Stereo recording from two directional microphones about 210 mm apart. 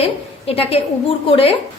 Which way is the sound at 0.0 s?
30° left (ahead or behind).